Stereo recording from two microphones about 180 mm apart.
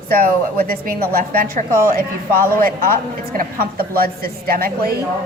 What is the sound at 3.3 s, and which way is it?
A woman's voice, 55° right (ahead or behind).